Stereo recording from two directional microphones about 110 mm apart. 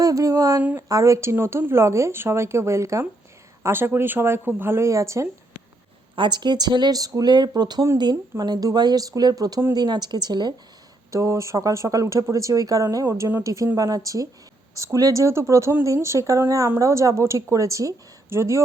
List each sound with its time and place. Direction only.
0.0 s a woman's voice: 30° right (ahead or behind)
6.1 s speech: 45° right (ahead or behind)
11.1 s a woman's voice: 30° right (ahead or behind)